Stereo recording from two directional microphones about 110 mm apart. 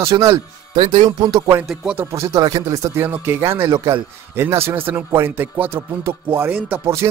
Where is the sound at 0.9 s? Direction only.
45° right (ahead or behind).